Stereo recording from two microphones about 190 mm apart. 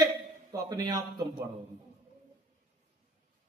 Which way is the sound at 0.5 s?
20° right (ahead or behind).